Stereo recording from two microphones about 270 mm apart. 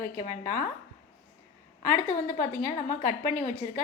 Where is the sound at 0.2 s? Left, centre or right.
Left.